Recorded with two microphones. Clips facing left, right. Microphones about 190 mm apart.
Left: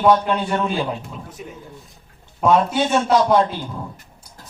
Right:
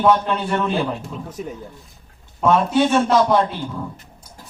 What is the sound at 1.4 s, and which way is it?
Speech, 40° right (ahead or behind).